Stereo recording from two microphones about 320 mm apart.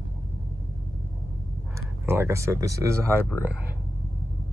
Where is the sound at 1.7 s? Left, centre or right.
Centre.